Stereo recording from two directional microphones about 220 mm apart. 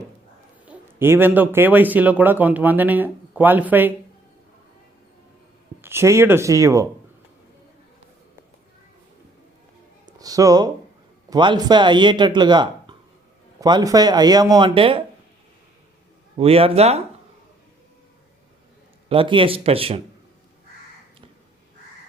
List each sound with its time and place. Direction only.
0.6 s speech: 10° right (ahead or behind)
5.8 s speech: 10° right (ahead or behind)
10.1 s a sound: 15° right (ahead or behind)
11.3 s a man's voice: 20° right (ahead or behind)
16.4 s a man's voice: 25° right (ahead or behind)
19.0 s a man's voice: 25° right (ahead or behind)